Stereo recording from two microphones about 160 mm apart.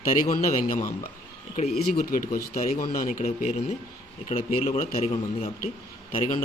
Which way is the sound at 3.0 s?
45° left (ahead or behind).